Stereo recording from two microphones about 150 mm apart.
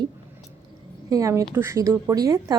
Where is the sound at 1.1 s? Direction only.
20° right (ahead or behind).